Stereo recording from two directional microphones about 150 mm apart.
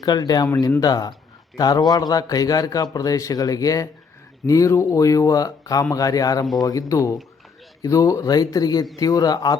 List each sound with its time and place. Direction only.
0.0 s a man's voice: 25° left (ahead or behind)
0.4 s a man's voice: 15° left (ahead or behind)